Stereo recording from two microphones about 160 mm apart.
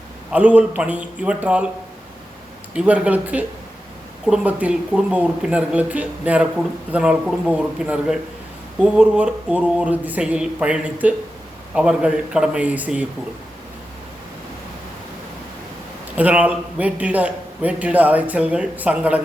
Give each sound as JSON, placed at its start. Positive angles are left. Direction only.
{"t": 0.3, "sound": "a man's voice", "side_deg": -10}
{"t": 2.7, "sound": "a man's voice", "side_deg": -5}
{"t": 16.1, "sound": "a man's voice", "side_deg": -10}